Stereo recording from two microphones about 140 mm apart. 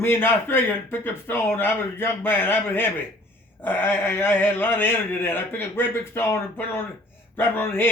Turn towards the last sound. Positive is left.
turn(degrees=15)  # may be behind; listen again after turning